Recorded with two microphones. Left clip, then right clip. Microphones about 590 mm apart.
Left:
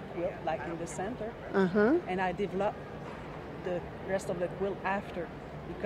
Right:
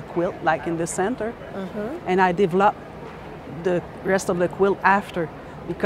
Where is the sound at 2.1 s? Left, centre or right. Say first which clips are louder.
Right 13 dB; right.